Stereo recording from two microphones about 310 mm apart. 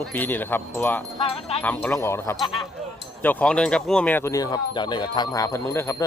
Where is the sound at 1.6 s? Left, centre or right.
Centre.